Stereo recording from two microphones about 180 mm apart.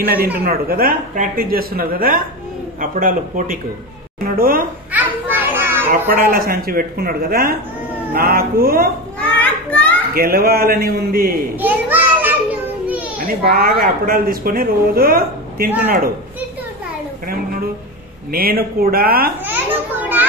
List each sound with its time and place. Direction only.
0.5 s speech: 55° right (ahead or behind)
4.9 s children playing: 10° right (ahead or behind)
5.9 s speech: 55° right (ahead or behind)
9.2 s children playing: 10° left (ahead or behind)
10.1 s speech: 55° right (ahead or behind)
11.6 s a sound: 10° right (ahead or behind)
13.3 s speech: 55° right (ahead or behind)
18.3 s speech: 55° right (ahead or behind)
19.4 s children playing: 10° right (ahead or behind)